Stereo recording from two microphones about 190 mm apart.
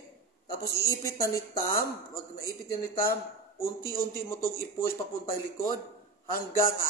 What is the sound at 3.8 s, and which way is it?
Speech, 50° left (ahead or behind).